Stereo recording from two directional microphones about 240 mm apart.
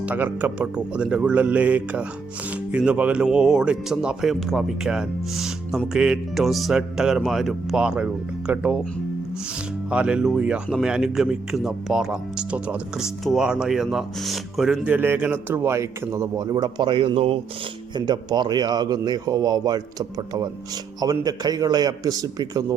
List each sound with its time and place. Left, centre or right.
0.0 s a man's voice: centre
9.9 s a man's voice: centre